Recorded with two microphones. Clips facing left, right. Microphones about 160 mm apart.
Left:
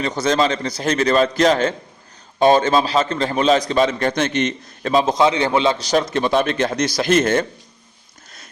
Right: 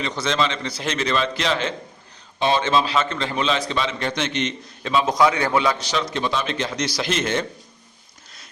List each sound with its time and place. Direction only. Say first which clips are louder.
0.0 s a man's voice: left 5 dB; 45° left (ahead or behind)
5.0 s a man's voice: left 2 dB; 25° left (ahead or behind)
5.8 s a man's voice: left 6 dB; 45° left (ahead or behind)